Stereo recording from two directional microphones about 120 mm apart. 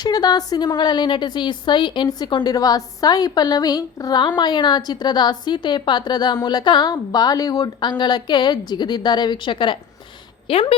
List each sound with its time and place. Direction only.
0.0 s a woman's voice: 35° left (ahead or behind); by 10.8 s 50° left (ahead or behind)